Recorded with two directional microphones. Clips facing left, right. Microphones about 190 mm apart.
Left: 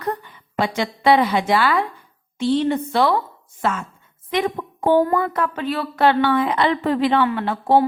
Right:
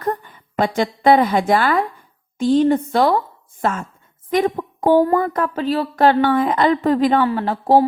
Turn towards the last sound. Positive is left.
turn(degrees=-35)  # may be behind; listen again after turning